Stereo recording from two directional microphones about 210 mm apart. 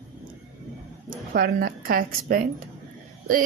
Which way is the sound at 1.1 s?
45° right (ahead or behind).